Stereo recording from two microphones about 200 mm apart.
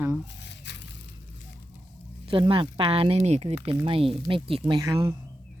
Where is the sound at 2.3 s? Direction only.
25° right (ahead or behind).